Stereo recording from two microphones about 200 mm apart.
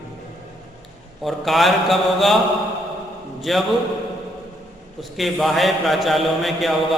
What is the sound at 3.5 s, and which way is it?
Speech, centre (ahead or behind).